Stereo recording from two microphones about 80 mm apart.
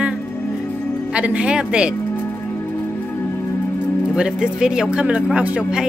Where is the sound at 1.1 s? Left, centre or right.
Centre.